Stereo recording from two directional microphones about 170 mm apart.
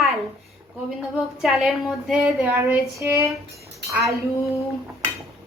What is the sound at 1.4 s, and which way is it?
A woman's voice, centre (ahead or behind).